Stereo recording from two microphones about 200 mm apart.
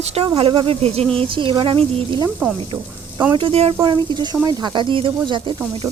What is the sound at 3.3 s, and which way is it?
Speech, 25° right (ahead or behind).